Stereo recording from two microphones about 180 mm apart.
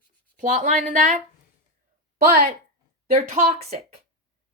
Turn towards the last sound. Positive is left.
turn(degrees=-35)  # may be behind; listen again after turning